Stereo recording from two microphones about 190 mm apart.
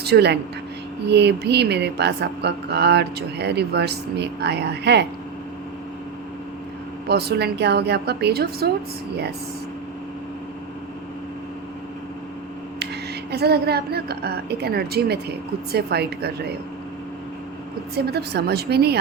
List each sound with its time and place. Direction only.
0.0 s speech: 60° right (ahead or behind)
7.1 s speech: 60° right (ahead or behind)
13.3 s speech: 55° right (ahead or behind)
17.9 s speech: 60° right (ahead or behind)